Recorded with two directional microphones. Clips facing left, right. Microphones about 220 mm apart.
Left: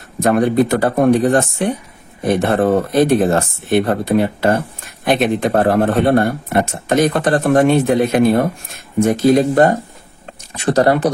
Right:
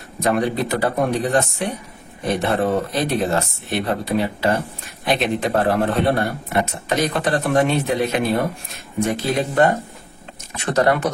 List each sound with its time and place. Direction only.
0.2 s speech: 50° left (ahead or behind); by 11.1 s 35° left (ahead or behind)